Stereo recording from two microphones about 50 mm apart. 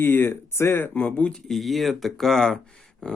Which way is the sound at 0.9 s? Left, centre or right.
Left.